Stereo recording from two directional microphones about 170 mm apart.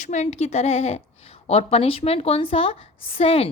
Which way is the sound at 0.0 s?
45° left (ahead or behind).